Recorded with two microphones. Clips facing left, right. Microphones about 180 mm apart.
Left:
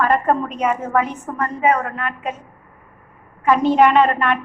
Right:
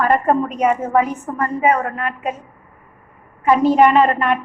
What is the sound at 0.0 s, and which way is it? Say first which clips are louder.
A woman's voice: right 2 dB; 10° right (ahead or behind).